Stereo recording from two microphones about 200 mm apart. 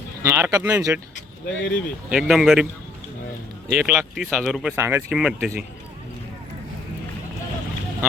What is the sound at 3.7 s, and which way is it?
Speech, 5° right (ahead or behind).